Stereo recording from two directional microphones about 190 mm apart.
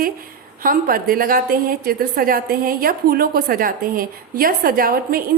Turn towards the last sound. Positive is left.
turn(degrees=-50)  # may be behind; listen again after turning